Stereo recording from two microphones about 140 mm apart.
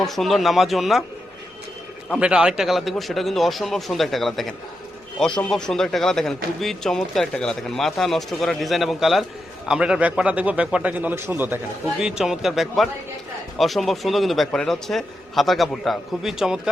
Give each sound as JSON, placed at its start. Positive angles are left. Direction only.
{"t": 0.0, "sound": "a man's voice", "side_deg": 0}
{"t": 2.1, "sound": "a man's voice", "side_deg": -5}
{"t": 11.9, "sound": "a man's voice", "side_deg": -5}